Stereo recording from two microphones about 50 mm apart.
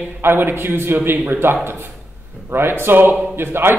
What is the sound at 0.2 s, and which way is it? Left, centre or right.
Speech, right.